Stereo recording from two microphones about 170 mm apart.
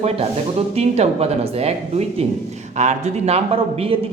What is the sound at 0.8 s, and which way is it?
A man's voice, 35° right (ahead or behind).